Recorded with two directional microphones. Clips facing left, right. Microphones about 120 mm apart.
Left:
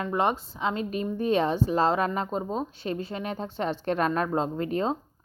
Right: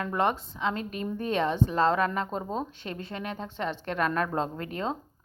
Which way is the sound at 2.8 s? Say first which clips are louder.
Left 5 dB; 30° left (ahead or behind).